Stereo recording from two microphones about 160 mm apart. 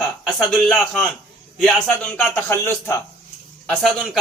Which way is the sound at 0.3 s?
Centre (ahead or behind).